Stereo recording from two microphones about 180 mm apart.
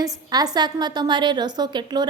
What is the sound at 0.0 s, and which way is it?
A woman's voice, 20° right (ahead or behind).